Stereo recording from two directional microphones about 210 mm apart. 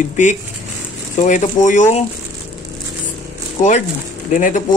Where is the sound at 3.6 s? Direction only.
40° left (ahead or behind).